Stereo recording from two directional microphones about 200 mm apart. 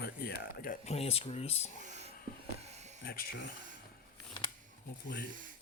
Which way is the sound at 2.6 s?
35° right (ahead or behind).